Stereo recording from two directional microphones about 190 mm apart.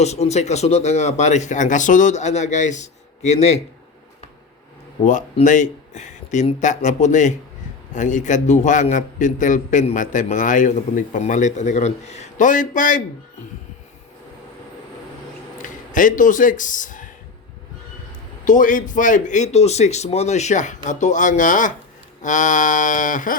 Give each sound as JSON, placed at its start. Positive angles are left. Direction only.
{"t": 0.0, "sound": "a man's voice", "side_deg": 35}
{"t": 5.0, "sound": "a man's voice", "side_deg": 40}
{"t": 15.6, "sound": "speech", "side_deg": 45}
{"t": 18.4, "sound": "a man's voice", "side_deg": 45}